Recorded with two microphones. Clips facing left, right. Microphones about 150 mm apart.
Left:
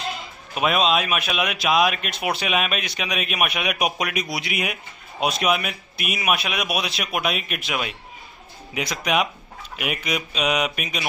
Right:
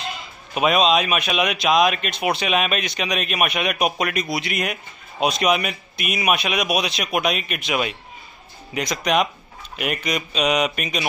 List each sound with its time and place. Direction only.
0.6 s a man's voice: centre (ahead or behind)